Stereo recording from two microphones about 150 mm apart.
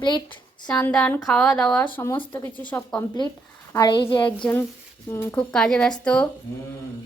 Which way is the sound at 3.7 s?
25° left (ahead or behind).